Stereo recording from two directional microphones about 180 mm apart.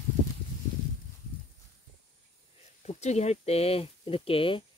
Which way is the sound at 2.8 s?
40° left (ahead or behind).